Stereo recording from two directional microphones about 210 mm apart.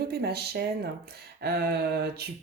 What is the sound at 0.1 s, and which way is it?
Speech, 50° right (ahead or behind).